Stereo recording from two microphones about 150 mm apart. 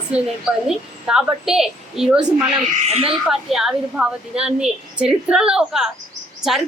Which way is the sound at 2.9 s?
40° right (ahead or behind).